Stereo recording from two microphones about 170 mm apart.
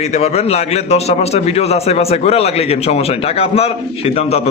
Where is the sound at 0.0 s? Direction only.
40° left (ahead or behind).